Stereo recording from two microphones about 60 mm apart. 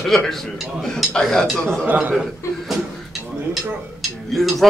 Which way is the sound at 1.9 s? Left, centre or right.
Right.